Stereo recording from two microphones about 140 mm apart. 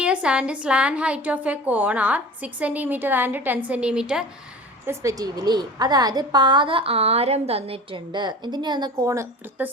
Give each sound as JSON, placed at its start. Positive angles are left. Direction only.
{"t": 0.0, "sound": "speech", "side_deg": -10}
{"t": 4.9, "sound": "a woman's voice", "side_deg": -25}